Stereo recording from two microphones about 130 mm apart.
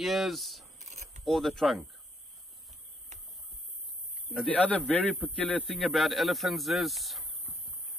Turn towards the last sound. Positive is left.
turn(degrees=0)  # may be behind; listen again after turning